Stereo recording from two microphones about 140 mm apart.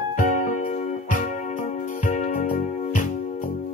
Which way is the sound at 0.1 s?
70° left (ahead or behind).